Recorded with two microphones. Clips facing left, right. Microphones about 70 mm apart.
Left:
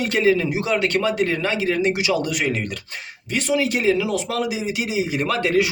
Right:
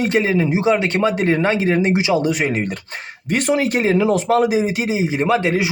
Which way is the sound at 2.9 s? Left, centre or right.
Right.